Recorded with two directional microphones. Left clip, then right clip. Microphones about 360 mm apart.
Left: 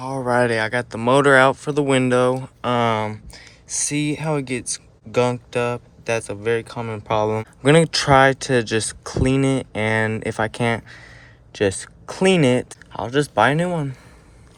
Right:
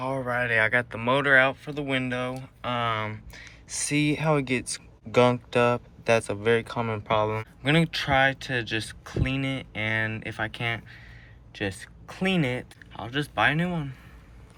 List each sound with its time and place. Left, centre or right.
0.0 s speech: centre
7.6 s speech: left